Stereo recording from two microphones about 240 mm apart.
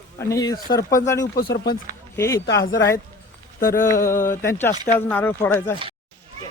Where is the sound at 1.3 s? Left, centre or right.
Left.